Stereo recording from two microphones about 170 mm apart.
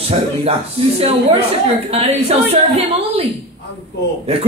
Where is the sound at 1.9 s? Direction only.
35° right (ahead or behind).